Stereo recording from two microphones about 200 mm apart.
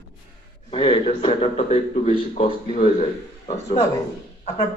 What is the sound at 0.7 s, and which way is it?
A man's voice, 25° left (ahead or behind).